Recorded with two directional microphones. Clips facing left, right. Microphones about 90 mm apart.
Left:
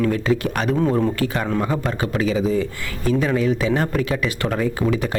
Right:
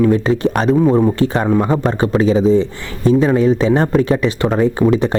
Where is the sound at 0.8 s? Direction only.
20° right (ahead or behind).